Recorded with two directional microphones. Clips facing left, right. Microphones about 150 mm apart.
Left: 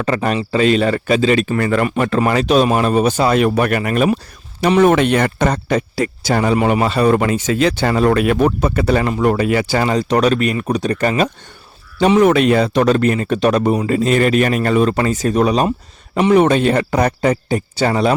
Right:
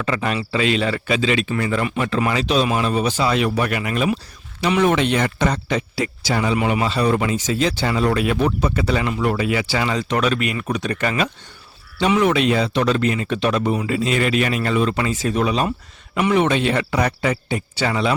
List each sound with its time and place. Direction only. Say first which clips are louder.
0.0 s speech: left 5 dB; 40° left (ahead or behind)